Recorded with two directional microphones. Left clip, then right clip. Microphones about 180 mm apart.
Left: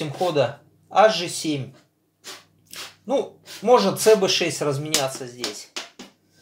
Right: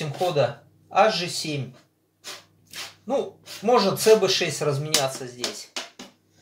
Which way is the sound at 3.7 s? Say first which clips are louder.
Left 2 dB; 30° left (ahead or behind).